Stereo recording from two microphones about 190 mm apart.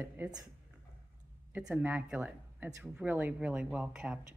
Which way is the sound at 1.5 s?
10° right (ahead or behind).